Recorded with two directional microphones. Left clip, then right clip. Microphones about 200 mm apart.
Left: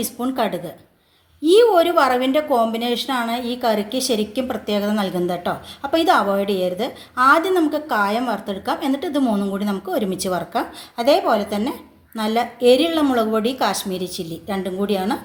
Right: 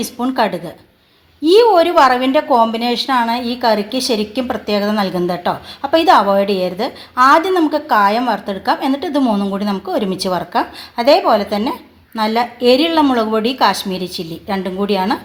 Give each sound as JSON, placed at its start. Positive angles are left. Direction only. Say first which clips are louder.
{"t": 0.0, "sound": "a woman's voice", "louder": "right 5 dB", "side_deg": -35}